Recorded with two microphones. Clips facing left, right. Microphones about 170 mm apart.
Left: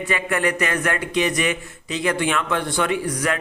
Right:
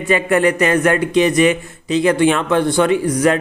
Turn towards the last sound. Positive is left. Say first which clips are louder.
# right 8 dB
turn(degrees=-30)  # may be behind; listen again after turning